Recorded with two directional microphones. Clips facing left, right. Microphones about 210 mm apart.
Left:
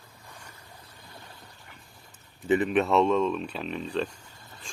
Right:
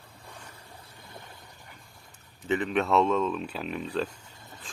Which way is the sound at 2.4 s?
10° left (ahead or behind).